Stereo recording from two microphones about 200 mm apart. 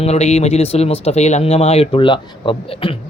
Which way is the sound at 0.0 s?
30° left (ahead or behind).